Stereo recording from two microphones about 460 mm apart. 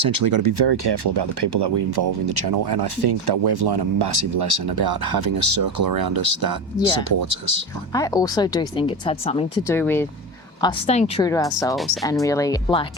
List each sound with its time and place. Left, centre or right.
0.0 s speech: right
7.9 s speech: centre